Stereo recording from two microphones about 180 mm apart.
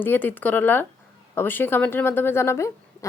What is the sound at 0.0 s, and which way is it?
A woman's voice, 10° left (ahead or behind).